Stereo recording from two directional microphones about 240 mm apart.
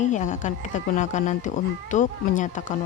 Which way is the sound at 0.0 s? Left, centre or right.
Left.